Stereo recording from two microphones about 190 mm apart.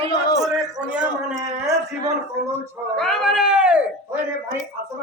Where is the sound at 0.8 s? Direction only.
5° right (ahead or behind).